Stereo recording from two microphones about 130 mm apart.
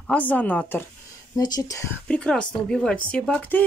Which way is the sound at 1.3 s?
30° left (ahead or behind).